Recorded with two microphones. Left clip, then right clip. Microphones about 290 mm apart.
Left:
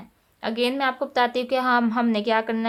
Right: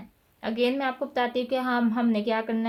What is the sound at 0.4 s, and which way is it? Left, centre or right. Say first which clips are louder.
Speech: left 3 dB; centre.